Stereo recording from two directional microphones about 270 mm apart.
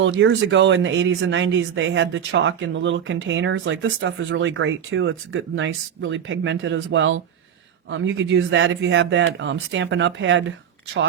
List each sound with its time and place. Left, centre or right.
0.0 s speech: right